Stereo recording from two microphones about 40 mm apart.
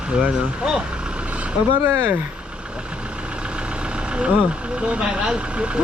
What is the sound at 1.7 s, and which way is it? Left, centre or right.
Speech, right.